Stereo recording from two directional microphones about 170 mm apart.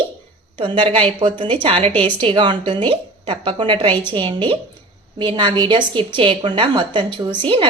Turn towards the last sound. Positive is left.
turn(degrees=-30)  # may be behind; listen again after turning